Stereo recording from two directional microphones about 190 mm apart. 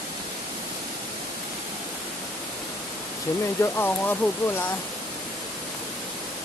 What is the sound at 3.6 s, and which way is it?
Speech, 10° left (ahead or behind).